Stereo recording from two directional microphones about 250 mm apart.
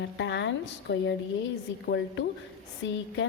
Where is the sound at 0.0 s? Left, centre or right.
Left.